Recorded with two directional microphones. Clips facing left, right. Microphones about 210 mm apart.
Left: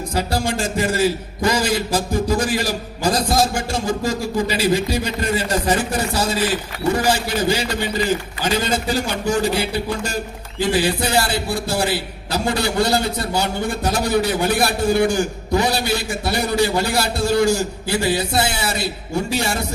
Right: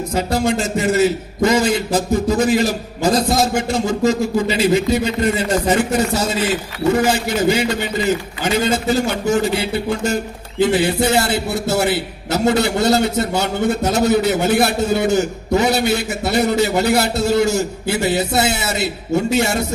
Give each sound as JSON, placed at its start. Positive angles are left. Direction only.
{"t": 0.1, "sound": "a man's voice", "side_deg": -25}